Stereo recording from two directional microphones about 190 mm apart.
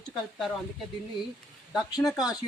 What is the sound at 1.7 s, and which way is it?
Speech, 20° left (ahead or behind).